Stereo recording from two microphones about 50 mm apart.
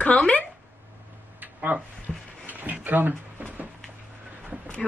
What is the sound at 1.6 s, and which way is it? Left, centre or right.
Speech, right.